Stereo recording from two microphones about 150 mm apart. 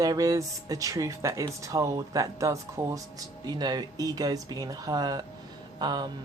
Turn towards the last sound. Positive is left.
turn(degrees=-30)  # may be behind; listen again after turning